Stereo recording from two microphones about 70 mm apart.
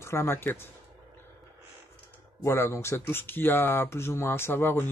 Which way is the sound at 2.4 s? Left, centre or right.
Left.